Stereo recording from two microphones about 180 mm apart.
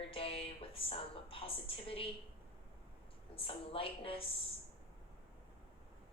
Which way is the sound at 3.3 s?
30° left (ahead or behind).